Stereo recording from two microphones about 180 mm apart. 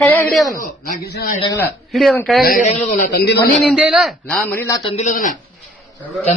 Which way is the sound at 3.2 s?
65° left (ahead or behind).